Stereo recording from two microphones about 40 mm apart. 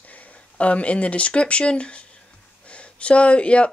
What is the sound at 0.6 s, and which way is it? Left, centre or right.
Speech, left.